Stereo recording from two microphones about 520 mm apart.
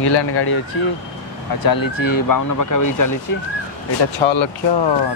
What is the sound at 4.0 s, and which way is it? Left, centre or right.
Speech, left.